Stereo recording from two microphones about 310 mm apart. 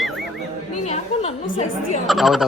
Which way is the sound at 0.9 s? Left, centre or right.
Centre.